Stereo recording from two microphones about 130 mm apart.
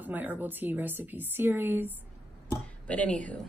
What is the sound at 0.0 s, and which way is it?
A woman's voice, 15° right (ahead or behind).